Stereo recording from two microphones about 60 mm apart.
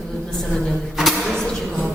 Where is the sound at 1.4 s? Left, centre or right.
Centre.